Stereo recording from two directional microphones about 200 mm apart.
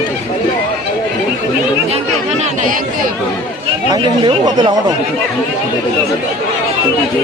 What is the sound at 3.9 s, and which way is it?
Speech, 20° right (ahead or behind).